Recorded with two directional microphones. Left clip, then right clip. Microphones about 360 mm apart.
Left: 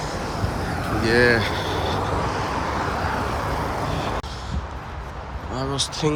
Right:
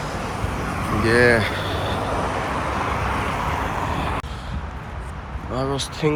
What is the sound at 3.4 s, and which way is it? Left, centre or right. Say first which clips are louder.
Vehicle: right 1 dB; right.